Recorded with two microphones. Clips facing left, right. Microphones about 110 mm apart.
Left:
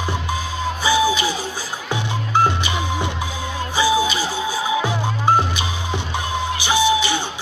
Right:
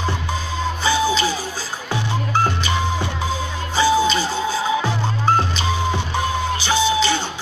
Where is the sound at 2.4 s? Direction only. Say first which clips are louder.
Even; 20° left (ahead or behind).